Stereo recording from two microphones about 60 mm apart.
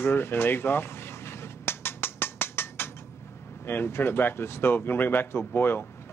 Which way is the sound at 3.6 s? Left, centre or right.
Left.